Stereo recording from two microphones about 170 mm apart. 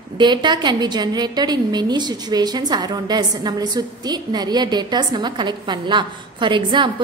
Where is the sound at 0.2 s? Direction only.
25° right (ahead or behind).